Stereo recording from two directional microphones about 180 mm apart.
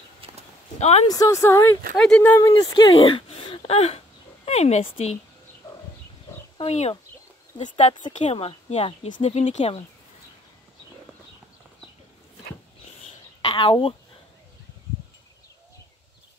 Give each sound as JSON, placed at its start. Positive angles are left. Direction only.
{"t": 0.2, "sound": "a sound", "side_deg": -30}
{"t": 0.7, "sound": "speech", "side_deg": 35}
{"t": 1.0, "sound": "speech", "side_deg": 20}
{"t": 2.5, "sound": "speech", "side_deg": 25}
{"t": 6.6, "sound": "speech", "side_deg": 35}
{"t": 13.0, "sound": "a sound", "side_deg": 30}